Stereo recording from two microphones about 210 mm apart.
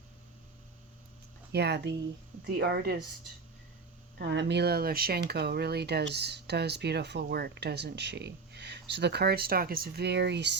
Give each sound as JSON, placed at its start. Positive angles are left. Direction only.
{"t": 1.5, "sound": "speech", "side_deg": -55}
{"t": 4.2, "sound": "speech", "side_deg": -55}